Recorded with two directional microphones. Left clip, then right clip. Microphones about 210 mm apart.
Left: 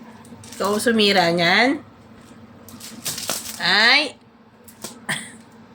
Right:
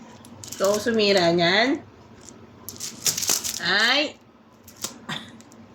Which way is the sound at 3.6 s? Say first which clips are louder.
Left 5 dB; 30° left (ahead or behind).